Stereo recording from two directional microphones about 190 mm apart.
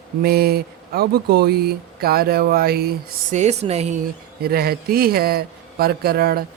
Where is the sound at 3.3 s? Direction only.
35° right (ahead or behind).